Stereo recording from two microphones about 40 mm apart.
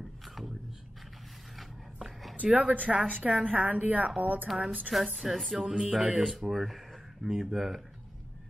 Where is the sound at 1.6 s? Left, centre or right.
Centre.